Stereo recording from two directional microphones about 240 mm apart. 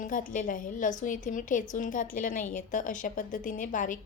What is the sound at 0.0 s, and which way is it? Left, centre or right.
A woman's voice, left.